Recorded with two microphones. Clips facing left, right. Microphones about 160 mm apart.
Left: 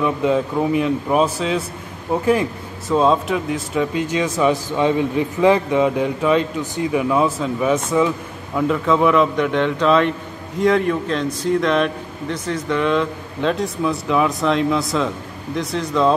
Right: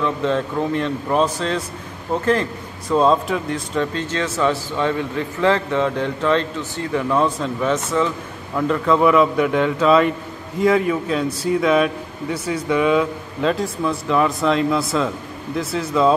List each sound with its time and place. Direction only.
0.0 s speech: 10° left (ahead or behind)
2.9 s speech: centre (ahead or behind)